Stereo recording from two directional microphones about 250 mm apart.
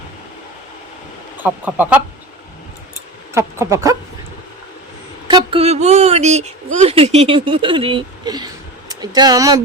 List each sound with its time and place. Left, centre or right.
1.4 s speech: centre
3.3 s speech: centre
5.3 s speech: right